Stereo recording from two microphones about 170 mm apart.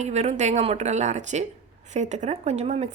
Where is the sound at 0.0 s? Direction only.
40° right (ahead or behind).